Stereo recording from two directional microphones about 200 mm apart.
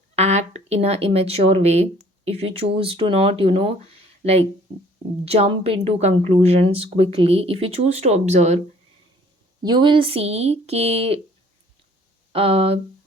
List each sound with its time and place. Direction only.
0.2 s speech: 35° right (ahead or behind)
9.6 s speech: 25° right (ahead or behind)
12.3 s speech: 30° right (ahead or behind)